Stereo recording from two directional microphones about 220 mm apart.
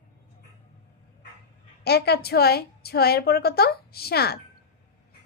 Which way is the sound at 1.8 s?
45° left (ahead or behind).